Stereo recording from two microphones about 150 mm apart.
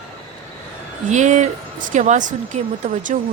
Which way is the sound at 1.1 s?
55° right (ahead or behind).